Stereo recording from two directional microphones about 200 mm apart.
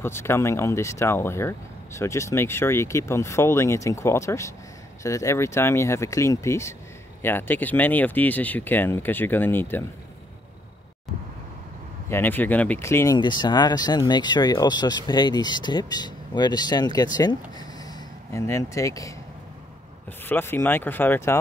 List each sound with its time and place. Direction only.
0.0 s speech: 10° left (ahead or behind)
12.1 s speech: 10° left (ahead or behind)
20.2 s speech: 10° left (ahead or behind)